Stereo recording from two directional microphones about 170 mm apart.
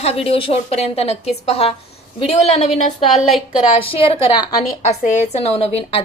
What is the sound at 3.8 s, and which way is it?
Speech, 35° left (ahead or behind).